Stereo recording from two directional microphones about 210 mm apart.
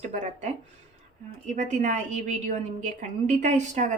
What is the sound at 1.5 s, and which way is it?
A woman's voice, 35° right (ahead or behind).